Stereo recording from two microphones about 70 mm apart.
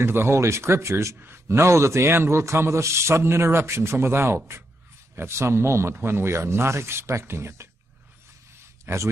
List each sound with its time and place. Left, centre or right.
0.0 s a man's voice: right
8.8 s a man's voice: right